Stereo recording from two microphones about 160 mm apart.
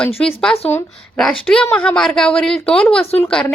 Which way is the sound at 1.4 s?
5° left (ahead or behind).